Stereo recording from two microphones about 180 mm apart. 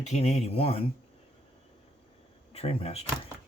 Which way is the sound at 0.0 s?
40° left (ahead or behind).